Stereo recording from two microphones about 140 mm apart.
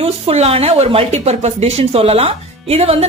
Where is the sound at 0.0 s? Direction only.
45° right (ahead or behind).